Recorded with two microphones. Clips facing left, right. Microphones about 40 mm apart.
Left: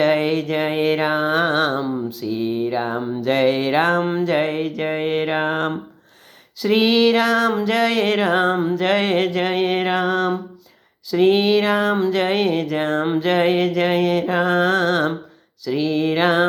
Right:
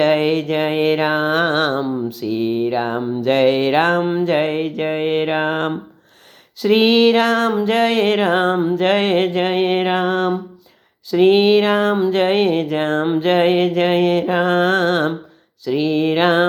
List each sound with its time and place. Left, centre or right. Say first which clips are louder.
0.0 s mantra: right 2 dB; right
6.7 s mantra: right 2 dB; right